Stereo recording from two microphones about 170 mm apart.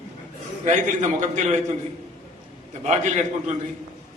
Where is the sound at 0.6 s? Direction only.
45° right (ahead or behind).